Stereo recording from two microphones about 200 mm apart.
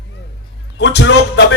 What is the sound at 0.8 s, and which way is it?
Speech, 60° left (ahead or behind).